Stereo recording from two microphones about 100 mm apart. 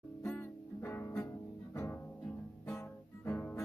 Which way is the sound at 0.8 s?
20° left (ahead or behind).